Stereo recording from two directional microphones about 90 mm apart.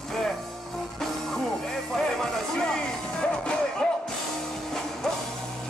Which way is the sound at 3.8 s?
5° left (ahead or behind).